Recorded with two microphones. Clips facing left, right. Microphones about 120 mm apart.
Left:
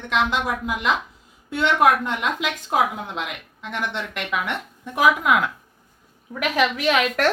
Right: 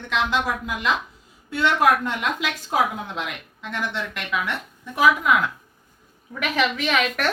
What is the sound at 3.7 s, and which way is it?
A woman's voice, 20° left (ahead or behind).